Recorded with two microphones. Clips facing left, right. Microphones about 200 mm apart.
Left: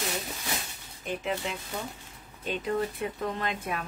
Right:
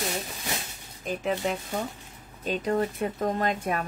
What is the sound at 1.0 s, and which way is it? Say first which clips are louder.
A woman's voice: right 4 dB; 40° right (ahead or behind).